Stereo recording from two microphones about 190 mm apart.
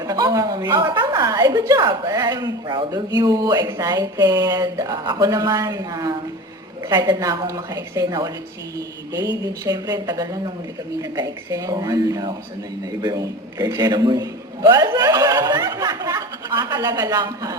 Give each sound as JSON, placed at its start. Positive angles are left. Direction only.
{"t": 0.0, "sound": "a woman's voice", "side_deg": -20}
{"t": 9.6, "sound": "a woman's voice", "side_deg": -20}